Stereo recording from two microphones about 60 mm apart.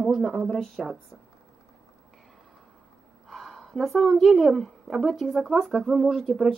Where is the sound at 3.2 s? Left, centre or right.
Centre.